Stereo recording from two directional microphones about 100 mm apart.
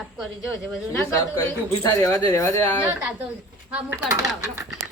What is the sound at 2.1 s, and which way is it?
Speech, 20° left (ahead or behind).